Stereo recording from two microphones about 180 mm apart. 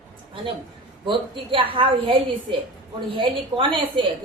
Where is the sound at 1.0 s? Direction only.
30° right (ahead or behind).